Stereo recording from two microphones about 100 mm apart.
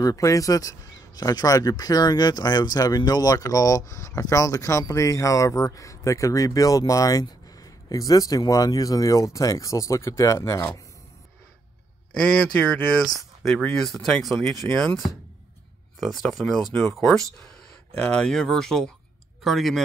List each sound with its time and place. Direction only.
0.0 s speech: 35° left (ahead or behind)
12.1 s a man's voice: 10° left (ahead or behind)
16.0 s speech: centre (ahead or behind)